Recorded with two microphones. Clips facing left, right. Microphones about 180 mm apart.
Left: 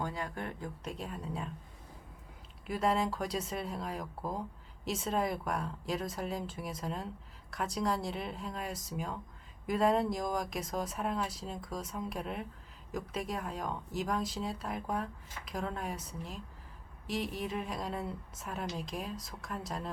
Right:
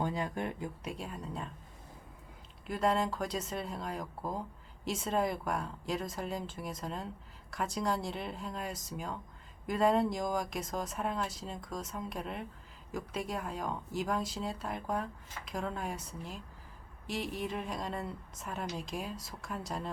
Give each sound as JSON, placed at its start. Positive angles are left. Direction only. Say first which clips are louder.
{"t": 0.0, "sound": "speech", "louder": "right 4 dB", "side_deg": -20}
{"t": 0.9, "sound": "speech", "louder": "left 1 dB", "side_deg": 0}
{"t": 2.6, "sound": "speech", "louder": "even", "side_deg": 0}